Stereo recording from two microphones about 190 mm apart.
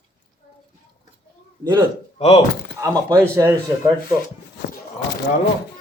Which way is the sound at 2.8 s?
15° right (ahead or behind).